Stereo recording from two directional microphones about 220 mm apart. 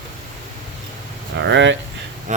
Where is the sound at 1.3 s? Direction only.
55° right (ahead or behind).